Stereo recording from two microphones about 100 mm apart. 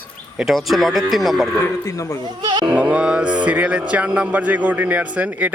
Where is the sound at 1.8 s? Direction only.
35° left (ahead or behind).